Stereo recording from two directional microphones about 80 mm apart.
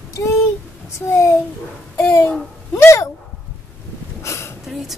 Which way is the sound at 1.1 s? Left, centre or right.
Left.